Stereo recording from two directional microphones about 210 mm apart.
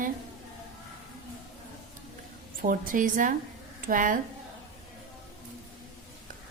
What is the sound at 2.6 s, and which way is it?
Speech, 40° right (ahead or behind).